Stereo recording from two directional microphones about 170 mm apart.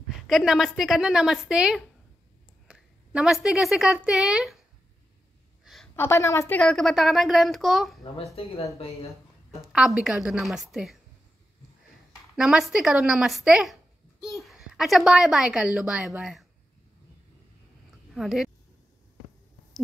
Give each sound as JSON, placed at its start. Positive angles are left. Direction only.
{"t": 0.3, "sound": "a woman's voice", "side_deg": 0}
{"t": 5.9, "sound": "a woman's voice", "side_deg": 15}
{"t": 6.6, "sound": "a woman's voice", "side_deg": 0}
{"t": 8.4, "sound": "speech", "side_deg": 35}
{"t": 9.6, "sound": "a woman's voice", "side_deg": 0}
{"t": 12.4, "sound": "a woman's voice", "side_deg": 0}
{"t": 18.1, "sound": "a woman's voice", "side_deg": 0}